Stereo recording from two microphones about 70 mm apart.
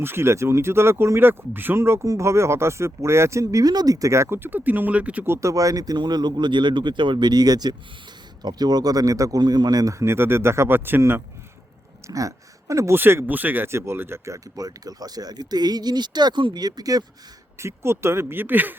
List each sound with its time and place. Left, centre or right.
0.0 s speech: right
3.4 s speech: right
5.2 s speech: right
5.5 s speech: right
9.4 s speech: right
12.0 s speech: right
12.9 s speech: right
13.7 s speech: right
14.3 s speech: right
17.6 s speech: right